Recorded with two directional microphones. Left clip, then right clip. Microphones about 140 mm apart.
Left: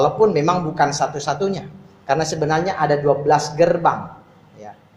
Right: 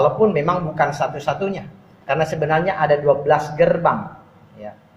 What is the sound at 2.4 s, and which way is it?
Speech, 60° left (ahead or behind).